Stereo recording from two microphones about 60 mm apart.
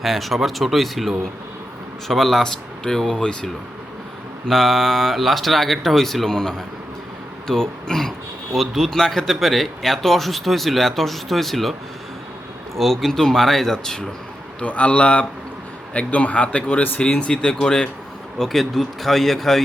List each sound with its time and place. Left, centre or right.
0.0 s speech: centre
12.7 s speech: centre
14.6 s speech: left; by 19.6 s centre